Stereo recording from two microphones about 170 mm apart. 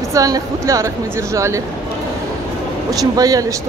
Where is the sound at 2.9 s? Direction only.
20° right (ahead or behind).